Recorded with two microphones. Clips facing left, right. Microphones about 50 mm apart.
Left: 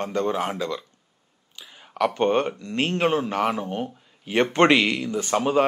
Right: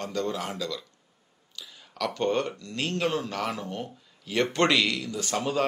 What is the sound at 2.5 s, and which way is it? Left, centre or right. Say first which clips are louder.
Speech: left 6 dB; left.